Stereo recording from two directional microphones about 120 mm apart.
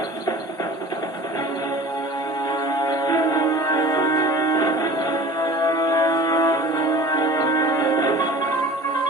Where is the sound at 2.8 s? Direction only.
35° left (ahead or behind).